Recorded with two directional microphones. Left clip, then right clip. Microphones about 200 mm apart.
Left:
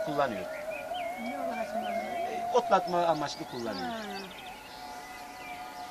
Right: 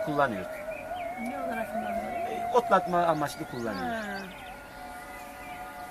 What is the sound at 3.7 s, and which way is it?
Speech, centre (ahead or behind).